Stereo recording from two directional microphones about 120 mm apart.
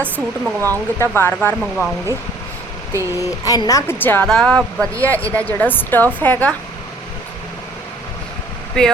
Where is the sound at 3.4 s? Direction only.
30° left (ahead or behind); by 6.5 s 15° left (ahead or behind).